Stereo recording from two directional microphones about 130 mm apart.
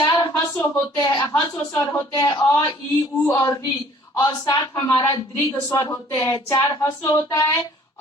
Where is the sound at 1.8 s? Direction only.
25° left (ahead or behind).